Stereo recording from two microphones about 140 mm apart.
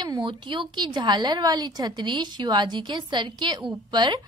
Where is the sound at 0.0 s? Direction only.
35° right (ahead or behind).